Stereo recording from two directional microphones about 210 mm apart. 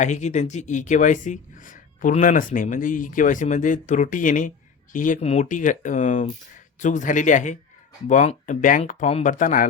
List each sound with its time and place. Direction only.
0.0 s speech: 35° left (ahead or behind)